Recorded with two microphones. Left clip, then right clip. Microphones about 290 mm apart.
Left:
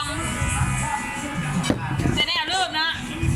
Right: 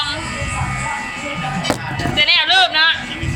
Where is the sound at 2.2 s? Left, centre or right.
Left.